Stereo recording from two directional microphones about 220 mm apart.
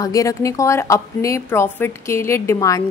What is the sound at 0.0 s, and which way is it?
A woman's voice, 15° left (ahead or behind).